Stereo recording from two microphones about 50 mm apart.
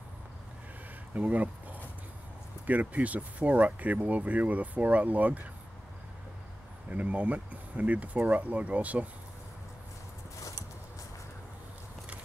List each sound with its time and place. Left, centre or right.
1.1 s speech: right
6.9 s speech: right